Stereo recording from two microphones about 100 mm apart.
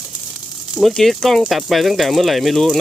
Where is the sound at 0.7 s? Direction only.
Centre (ahead or behind).